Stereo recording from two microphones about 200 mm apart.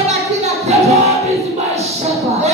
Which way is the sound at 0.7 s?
30° right (ahead or behind).